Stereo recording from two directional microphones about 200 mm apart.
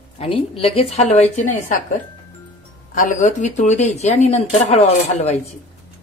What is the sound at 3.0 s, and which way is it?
Speech, 40° left (ahead or behind).